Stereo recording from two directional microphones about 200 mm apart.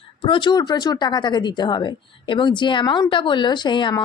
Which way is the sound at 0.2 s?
25° left (ahead or behind).